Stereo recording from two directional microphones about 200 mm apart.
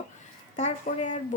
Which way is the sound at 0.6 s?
35° left (ahead or behind).